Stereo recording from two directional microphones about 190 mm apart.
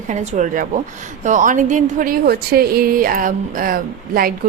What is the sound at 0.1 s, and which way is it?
A woman's voice, 40° right (ahead or behind).